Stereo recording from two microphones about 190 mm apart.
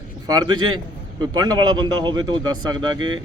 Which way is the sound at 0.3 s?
20° right (ahead or behind).